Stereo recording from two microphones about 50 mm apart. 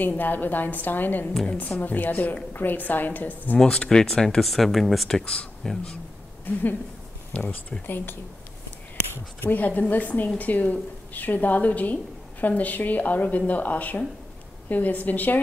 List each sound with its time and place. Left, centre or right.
0.0 s speech: left
3.5 s speech: centre
5.2 s speech: left
5.6 s speech: centre
7.3 s speech: left
7.8 s a woman's voice: left
9.4 s speech: left